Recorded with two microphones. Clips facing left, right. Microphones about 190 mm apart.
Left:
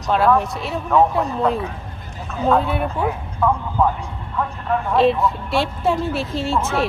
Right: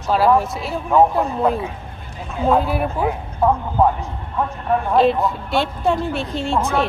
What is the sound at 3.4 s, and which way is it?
Speech, 35° right (ahead or behind).